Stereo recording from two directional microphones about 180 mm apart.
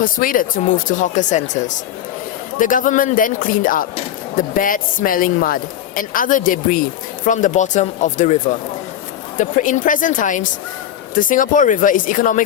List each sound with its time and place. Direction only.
0.0 s speech: 50° left (ahead or behind)
9.4 s speech: 45° left (ahead or behind)